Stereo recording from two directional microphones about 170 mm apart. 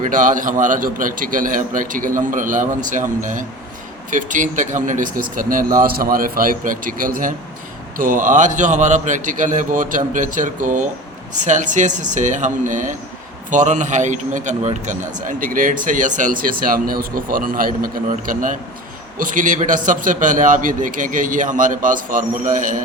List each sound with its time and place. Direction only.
0.0 s a man's voice: 50° right (ahead or behind)